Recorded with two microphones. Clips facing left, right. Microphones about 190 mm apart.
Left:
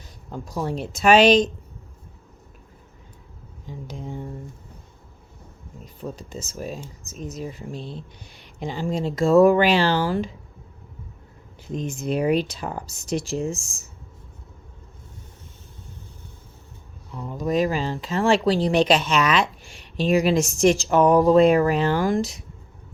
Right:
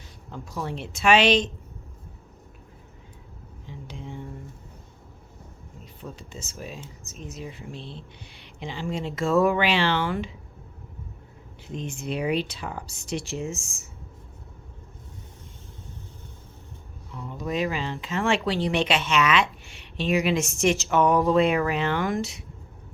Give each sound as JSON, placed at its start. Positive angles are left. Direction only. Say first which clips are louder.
{"t": 0.3, "sound": "speech", "louder": "left 5 dB", "side_deg": 35}
{"t": 3.7, "sound": "speech", "louder": "left 5 dB", "side_deg": 40}
{"t": 5.8, "sound": "speech", "louder": "left 7 dB", "side_deg": 40}
{"t": 11.7, "sound": "speech", "louder": "left 5 dB", "side_deg": 40}
{"t": 17.2, "sound": "speech", "louder": "left 5 dB", "side_deg": 40}